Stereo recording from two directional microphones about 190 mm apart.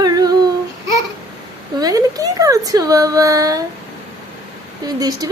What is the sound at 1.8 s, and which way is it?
Speech, 20° right (ahead or behind).